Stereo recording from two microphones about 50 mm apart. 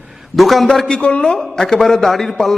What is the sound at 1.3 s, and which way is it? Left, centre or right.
A man's voice, centre.